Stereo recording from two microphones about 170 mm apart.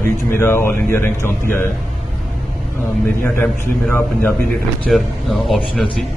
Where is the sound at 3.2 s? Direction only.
10° left (ahead or behind).